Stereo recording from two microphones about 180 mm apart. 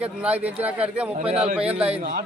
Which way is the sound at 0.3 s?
5° right (ahead or behind).